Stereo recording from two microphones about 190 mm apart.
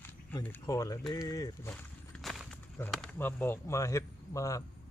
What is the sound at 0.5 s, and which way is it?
A man's voice, 20° left (ahead or behind).